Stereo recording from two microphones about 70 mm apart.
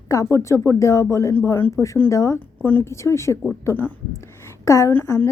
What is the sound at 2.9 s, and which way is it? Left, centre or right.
A woman's voice, left.